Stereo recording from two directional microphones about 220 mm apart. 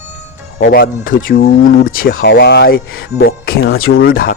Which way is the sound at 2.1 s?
50° left (ahead or behind).